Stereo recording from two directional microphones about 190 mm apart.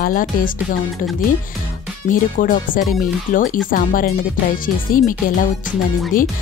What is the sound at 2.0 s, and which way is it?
Speech, 40° left (ahead or behind).